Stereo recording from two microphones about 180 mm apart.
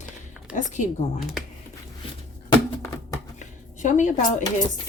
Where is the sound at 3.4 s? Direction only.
45° left (ahead or behind).